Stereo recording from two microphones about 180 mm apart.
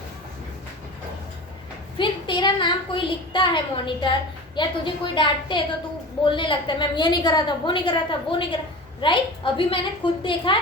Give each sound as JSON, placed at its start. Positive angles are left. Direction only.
{"t": 2.0, "sound": "a woman's voice", "side_deg": 25}